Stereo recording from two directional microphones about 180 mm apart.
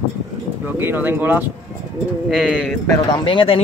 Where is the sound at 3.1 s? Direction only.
30° left (ahead or behind).